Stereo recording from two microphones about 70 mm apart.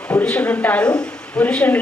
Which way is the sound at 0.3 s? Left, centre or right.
Left.